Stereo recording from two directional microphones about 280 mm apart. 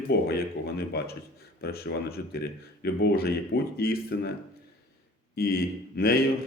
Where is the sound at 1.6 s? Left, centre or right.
Left.